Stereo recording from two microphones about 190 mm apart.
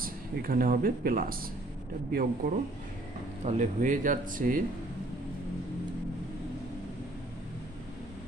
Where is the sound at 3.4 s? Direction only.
40° right (ahead or behind).